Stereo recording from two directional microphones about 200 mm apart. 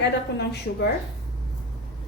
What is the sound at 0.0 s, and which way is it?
Speech, 60° left (ahead or behind).